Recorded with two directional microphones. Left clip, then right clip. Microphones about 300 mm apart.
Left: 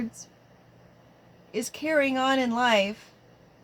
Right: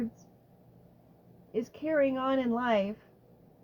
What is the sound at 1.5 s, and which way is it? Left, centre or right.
A woman's voice, left.